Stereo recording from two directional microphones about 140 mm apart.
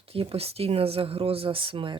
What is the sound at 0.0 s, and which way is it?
Speech, 45° right (ahead or behind).